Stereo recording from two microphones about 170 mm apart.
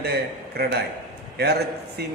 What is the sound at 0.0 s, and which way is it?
A man's voice, 70° right (ahead or behind).